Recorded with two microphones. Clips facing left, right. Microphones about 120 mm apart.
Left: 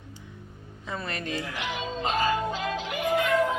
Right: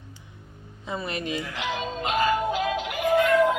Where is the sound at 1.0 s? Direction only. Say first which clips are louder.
Right 3 dB; 15° right (ahead or behind).